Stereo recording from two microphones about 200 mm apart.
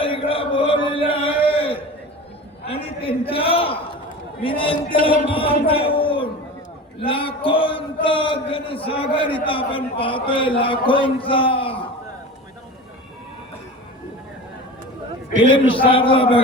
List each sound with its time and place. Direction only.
0.0 s chant: 25° left (ahead or behind)
2.6 s a sound: 30° left (ahead or behind)
4.4 s a man's voice: 25° left (ahead or behind)
15.5 s a man's voice: 25° left (ahead or behind)